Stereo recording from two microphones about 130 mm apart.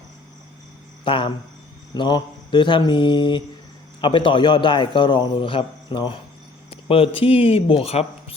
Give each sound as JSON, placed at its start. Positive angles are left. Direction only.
{"t": 1.0, "sound": "speech", "side_deg": 40}